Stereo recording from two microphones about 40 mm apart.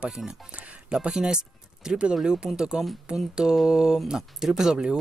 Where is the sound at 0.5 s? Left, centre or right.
Right.